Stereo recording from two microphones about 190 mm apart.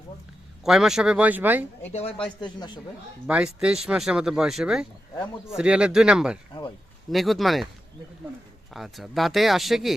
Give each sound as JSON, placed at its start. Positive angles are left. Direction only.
{"t": 0.6, "sound": "speech", "side_deg": 0}
{"t": 1.9, "sound": "a man's voice", "side_deg": 30}
{"t": 3.2, "sound": "speech", "side_deg": -5}
{"t": 8.7, "sound": "speech", "side_deg": 0}